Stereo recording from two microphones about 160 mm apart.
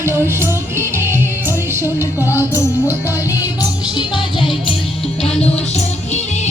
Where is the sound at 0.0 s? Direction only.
15° right (ahead or behind).